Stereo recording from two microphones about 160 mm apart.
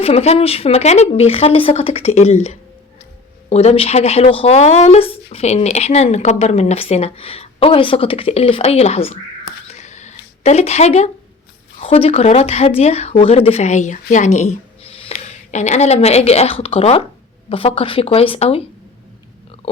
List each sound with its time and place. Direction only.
0.0 s speech: 40° left (ahead or behind)
9.6 s a sound: 45° left (ahead or behind)
11.8 s speech: 40° left (ahead or behind)